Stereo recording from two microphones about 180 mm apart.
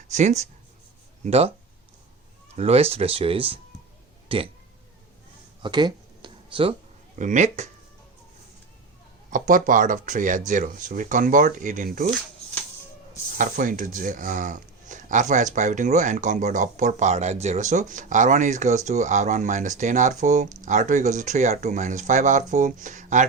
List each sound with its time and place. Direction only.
0.1 s speech: 40° right (ahead or behind)
2.6 s speech: 35° right (ahead or behind)
5.6 s a sound: 25° right (ahead or behind)
7.2 s speech: 45° right (ahead or behind)
9.3 s speech: 50° right (ahead or behind)
13.3 s speech: 50° right (ahead or behind)